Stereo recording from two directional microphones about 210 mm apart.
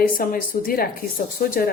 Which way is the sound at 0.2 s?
45° left (ahead or behind).